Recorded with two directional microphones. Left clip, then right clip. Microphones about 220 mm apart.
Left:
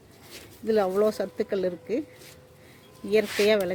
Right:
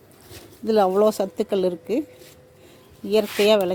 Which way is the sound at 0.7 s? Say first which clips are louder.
Right 5 dB; 20° right (ahead or behind).